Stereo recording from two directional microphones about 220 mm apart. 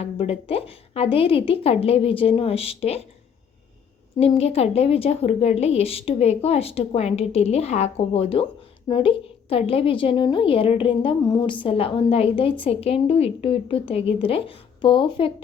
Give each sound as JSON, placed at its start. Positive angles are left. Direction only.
{"t": 0.0, "sound": "a woman's voice", "side_deg": 25}
{"t": 4.2, "sound": "a woman's voice", "side_deg": 25}